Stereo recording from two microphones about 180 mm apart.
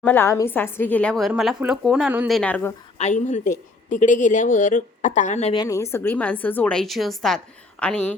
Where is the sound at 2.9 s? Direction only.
40° left (ahead or behind).